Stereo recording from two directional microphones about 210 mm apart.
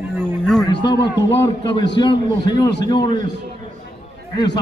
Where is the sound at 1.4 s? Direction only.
20° left (ahead or behind).